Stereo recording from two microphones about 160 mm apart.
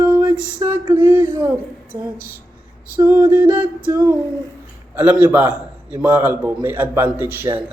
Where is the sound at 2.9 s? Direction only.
10° right (ahead or behind).